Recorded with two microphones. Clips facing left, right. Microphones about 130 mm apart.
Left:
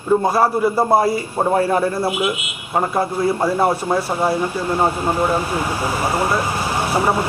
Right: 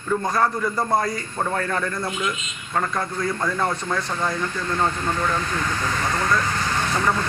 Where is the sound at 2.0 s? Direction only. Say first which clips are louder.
Left 7 dB; 10° left (ahead or behind).